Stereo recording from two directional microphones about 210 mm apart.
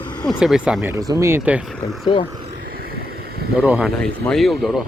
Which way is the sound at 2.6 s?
45° right (ahead or behind).